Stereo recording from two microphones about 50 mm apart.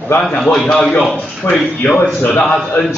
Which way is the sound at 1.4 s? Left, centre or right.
Left.